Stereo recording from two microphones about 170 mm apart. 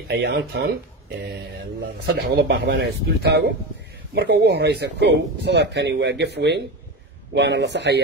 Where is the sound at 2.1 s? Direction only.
75° right (ahead or behind).